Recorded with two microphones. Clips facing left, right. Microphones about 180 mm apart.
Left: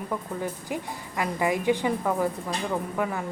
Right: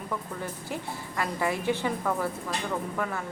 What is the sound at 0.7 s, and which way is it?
A woman's voice, 10° left (ahead or behind).